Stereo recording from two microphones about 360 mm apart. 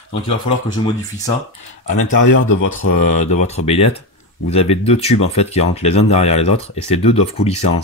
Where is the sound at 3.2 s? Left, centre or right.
Centre.